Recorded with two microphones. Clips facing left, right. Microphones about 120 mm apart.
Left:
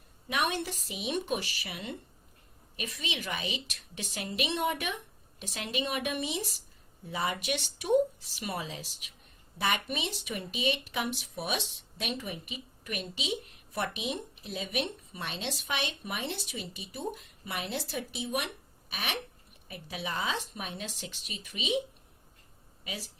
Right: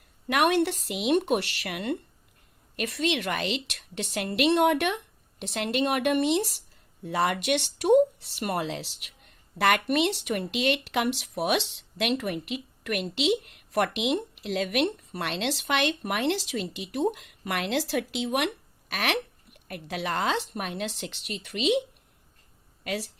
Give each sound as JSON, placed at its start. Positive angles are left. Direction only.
{"t": 0.3, "sound": "speech", "side_deg": -70}